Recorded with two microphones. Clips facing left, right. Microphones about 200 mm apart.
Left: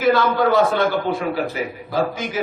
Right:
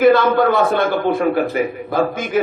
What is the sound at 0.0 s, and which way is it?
A man's voice, 55° right (ahead or behind).